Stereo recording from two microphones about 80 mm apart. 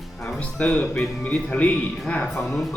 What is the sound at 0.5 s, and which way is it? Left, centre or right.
Speech, centre.